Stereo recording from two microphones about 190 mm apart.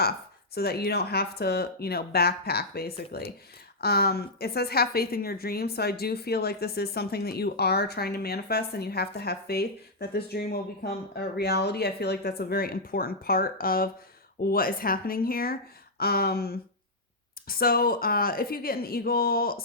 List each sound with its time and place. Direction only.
0.5 s a woman's voice: 55° left (ahead or behind)